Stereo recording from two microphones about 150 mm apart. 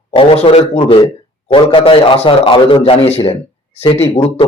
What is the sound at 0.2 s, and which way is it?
A man's voice, 35° left (ahead or behind).